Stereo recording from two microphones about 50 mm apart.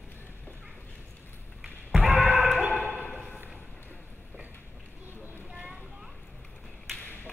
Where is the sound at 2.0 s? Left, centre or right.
Right.